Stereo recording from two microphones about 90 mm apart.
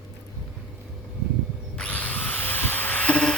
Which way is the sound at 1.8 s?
15° left (ahead or behind).